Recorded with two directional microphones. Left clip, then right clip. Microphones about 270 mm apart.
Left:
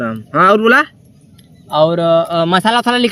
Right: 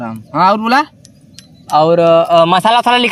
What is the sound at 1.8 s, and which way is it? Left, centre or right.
Speech, right.